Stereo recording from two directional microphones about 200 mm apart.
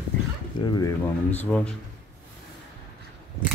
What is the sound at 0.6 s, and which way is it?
Speech, 20° left (ahead or behind).